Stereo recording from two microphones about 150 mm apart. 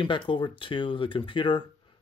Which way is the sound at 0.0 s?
35° left (ahead or behind).